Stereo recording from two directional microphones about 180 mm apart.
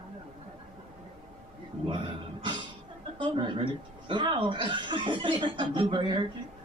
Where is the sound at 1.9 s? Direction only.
25° right (ahead or behind).